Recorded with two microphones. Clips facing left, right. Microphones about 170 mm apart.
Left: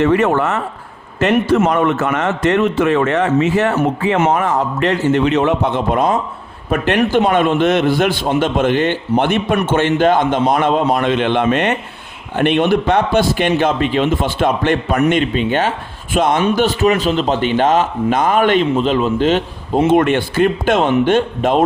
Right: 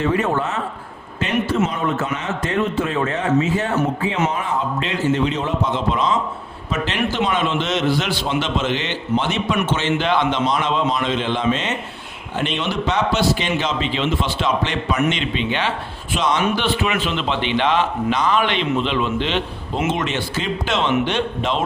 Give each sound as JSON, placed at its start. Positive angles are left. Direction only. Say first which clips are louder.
{"t": 0.0, "sound": "a man's voice", "louder": "left 6 dB", "side_deg": 75}